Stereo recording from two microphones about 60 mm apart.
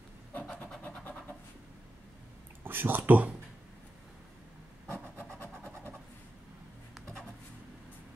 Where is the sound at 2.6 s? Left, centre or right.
Right.